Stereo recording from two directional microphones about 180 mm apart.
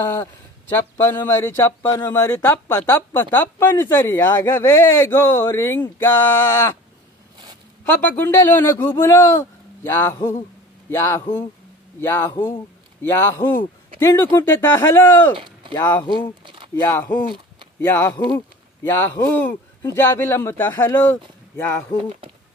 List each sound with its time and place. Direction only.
0.0 s speech: 10° left (ahead or behind)
7.8 s speech: 10° left (ahead or behind)
15.3 s a sound: 25° right (ahead or behind)
15.7 s speech: 10° left (ahead or behind)
16.0 s speech: 25° left (ahead or behind)
16.4 s a sound: 30° right (ahead or behind)
17.7 s speech: 10° left (ahead or behind)